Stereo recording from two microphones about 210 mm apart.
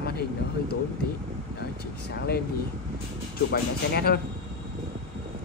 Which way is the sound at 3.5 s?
50° left (ahead or behind).